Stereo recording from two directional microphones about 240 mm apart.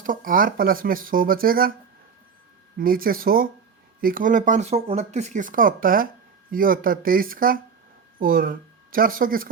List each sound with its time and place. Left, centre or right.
0.0 s speech: right
2.7 s speech: right